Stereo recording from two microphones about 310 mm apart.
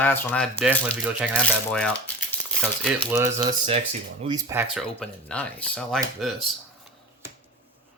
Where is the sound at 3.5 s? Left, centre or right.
Centre.